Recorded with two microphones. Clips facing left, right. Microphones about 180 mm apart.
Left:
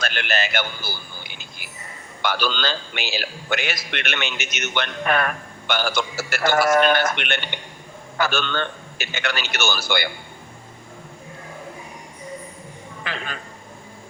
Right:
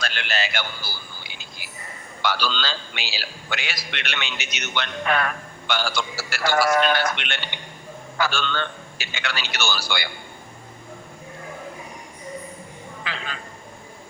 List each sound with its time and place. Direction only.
0.0 s a sound: 50° left (ahead or behind)
2.2 s a man's voice: 50° left (ahead or behind)
13.1 s a man's voice: 50° left (ahead or behind)